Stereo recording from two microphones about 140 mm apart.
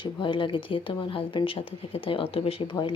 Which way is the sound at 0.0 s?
35° left (ahead or behind).